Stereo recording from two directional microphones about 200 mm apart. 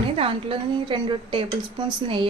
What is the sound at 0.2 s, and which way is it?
A woman's voice, 25° right (ahead or behind).